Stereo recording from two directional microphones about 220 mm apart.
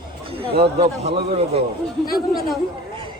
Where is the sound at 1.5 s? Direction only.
25° right (ahead or behind).